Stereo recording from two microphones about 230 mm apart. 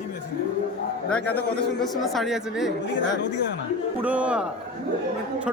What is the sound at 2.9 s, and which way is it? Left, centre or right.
Speech, left.